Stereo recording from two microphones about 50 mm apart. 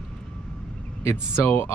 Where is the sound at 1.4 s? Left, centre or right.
Left.